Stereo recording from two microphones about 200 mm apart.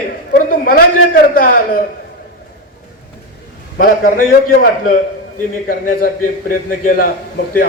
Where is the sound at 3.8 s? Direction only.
45° left (ahead or behind).